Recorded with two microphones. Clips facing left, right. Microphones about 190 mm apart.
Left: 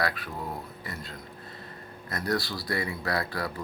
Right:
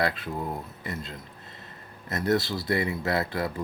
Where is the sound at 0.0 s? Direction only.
25° right (ahead or behind).